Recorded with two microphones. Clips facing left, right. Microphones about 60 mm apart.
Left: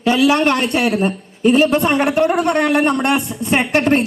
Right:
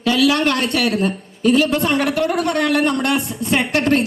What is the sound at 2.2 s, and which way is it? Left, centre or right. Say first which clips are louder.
A man's voice: left 3 dB; left.